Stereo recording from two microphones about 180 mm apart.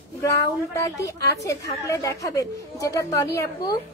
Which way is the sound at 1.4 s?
15° left (ahead or behind).